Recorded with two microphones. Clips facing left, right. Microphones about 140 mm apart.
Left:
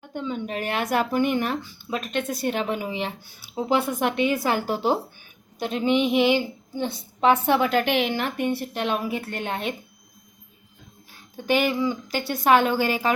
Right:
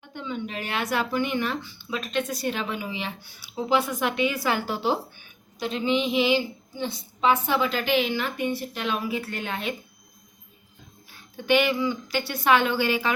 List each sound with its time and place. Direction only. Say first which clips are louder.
0.1 s speech: left 3 dB; 40° left (ahead or behind)
3.9 s a woman's voice: left 3 dB; 50° left (ahead or behind)
11.4 s speech: even; 40° left (ahead or behind)